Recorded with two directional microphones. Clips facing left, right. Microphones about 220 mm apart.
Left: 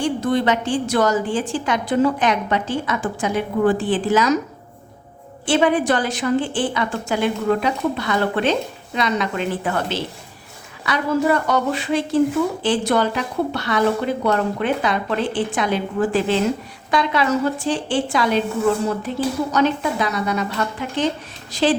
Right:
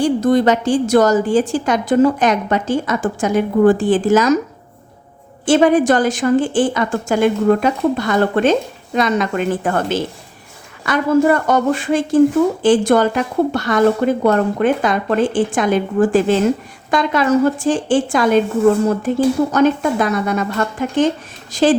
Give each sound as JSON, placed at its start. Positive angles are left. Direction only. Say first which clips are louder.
{"t": 0.0, "sound": "a woman's voice", "louder": "right 6 dB", "side_deg": -40}
{"t": 5.5, "sound": "a woman's voice", "louder": "right 5 dB", "side_deg": -45}